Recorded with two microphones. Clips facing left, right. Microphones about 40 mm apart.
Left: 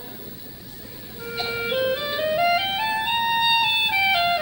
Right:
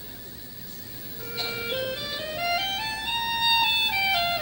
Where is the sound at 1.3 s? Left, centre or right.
Centre.